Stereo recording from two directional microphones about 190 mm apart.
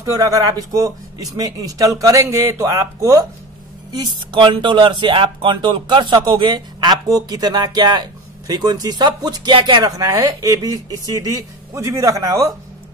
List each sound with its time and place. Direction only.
0.0 s speech: 15° right (ahead or behind)